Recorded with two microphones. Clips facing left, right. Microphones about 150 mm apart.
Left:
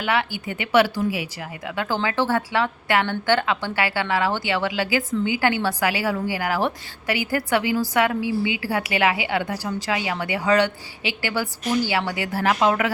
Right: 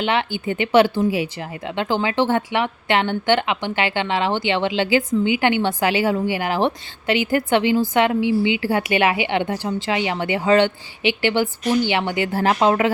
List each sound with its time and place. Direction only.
0.0 s speech: 25° right (ahead or behind)